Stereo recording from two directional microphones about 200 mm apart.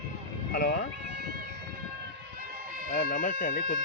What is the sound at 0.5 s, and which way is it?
Speech, 55° left (ahead or behind).